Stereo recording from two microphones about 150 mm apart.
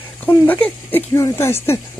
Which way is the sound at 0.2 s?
10° left (ahead or behind).